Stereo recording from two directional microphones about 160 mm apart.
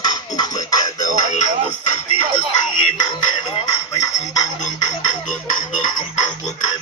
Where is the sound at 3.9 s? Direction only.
20° left (ahead or behind).